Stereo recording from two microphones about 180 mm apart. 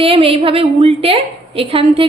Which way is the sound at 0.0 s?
30° right (ahead or behind).